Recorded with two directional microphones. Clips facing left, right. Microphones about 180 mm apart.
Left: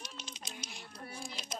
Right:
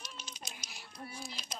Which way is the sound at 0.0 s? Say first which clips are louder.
Left 2 dB; 25° left (ahead or behind).